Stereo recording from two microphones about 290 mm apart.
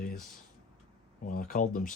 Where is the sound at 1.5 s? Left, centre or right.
Left.